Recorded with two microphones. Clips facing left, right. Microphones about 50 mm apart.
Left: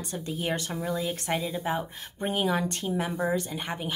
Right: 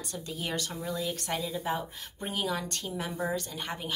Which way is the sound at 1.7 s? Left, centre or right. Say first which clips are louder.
Left 3 dB; left.